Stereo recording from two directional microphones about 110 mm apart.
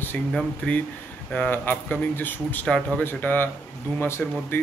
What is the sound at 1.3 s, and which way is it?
Speech, 15° left (ahead or behind).